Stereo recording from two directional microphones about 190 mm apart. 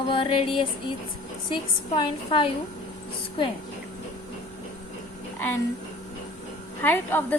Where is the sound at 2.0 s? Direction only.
25° left (ahead or behind).